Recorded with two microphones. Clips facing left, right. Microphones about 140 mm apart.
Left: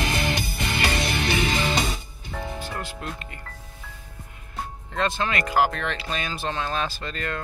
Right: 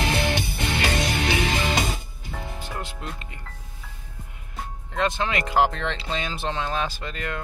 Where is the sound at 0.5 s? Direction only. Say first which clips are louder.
Right 1 dB; 55° right (ahead or behind).